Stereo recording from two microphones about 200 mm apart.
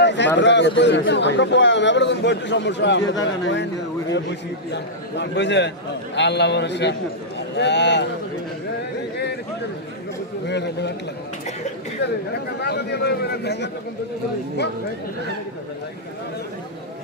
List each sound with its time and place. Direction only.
0.0 s a sound: 60° left (ahead or behind)
0.3 s a man's voice: 60° left (ahead or behind)
10.4 s a man's voice: 60° left (ahead or behind)
12.5 s a man's voice: 55° left (ahead or behind)